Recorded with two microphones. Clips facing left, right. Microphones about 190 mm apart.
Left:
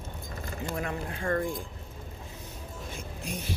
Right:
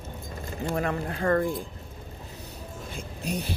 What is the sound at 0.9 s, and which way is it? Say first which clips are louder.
Speech: right 6 dB; 60° right (ahead or behind).